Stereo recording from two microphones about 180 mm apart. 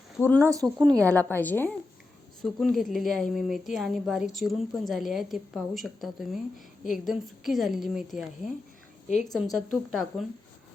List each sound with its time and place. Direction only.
0.2 s a woman's voice: 10° left (ahead or behind)
0.4 s speech: 20° right (ahead or behind)
1.3 s a woman's voice: 10° left (ahead or behind)